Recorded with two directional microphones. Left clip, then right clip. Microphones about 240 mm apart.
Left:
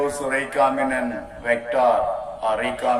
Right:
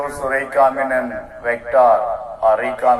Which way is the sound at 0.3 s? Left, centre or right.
Right.